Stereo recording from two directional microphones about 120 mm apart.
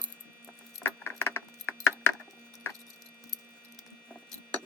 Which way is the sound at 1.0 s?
20° left (ahead or behind).